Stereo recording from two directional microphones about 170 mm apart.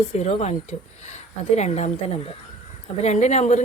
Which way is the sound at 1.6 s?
40° left (ahead or behind).